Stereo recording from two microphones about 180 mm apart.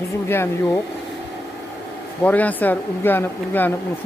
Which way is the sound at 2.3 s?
10° left (ahead or behind).